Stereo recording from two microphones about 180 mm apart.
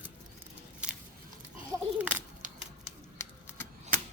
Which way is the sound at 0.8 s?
5° right (ahead or behind).